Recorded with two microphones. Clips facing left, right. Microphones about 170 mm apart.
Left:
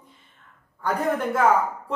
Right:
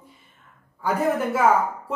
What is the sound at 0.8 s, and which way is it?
Speech, 5° right (ahead or behind).